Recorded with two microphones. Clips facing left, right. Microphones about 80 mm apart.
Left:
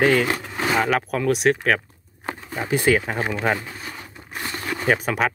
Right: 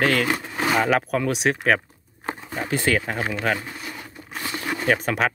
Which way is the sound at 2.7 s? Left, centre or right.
Centre.